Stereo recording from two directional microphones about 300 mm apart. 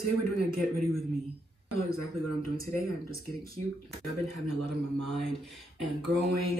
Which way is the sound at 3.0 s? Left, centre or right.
Right.